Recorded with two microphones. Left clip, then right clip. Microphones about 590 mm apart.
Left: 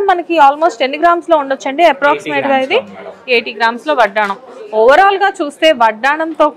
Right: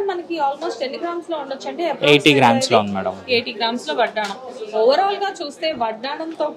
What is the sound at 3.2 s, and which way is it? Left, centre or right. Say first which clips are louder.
A woman's voice: left 10 dB; left.